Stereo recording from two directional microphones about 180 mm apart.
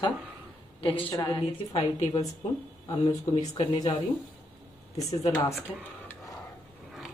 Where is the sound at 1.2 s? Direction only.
25° left (ahead or behind).